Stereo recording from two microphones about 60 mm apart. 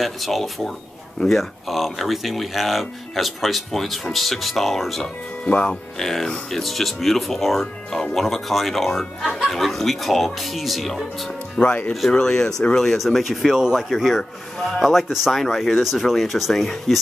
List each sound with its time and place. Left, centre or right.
0.0 s speech: centre
5.0 s speech: centre
5.9 s speech: centre
11.6 s speech: left
12.1 s speech: centre